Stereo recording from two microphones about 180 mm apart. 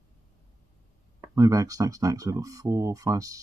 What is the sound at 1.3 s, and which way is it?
Speech, 20° right (ahead or behind).